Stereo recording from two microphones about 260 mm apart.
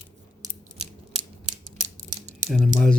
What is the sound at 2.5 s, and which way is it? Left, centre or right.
Speech, centre.